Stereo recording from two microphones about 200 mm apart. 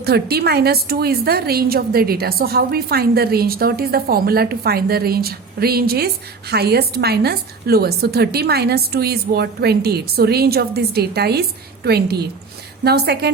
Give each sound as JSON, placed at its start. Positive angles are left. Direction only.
{"t": 0.0, "sound": "a woman's voice", "side_deg": -55}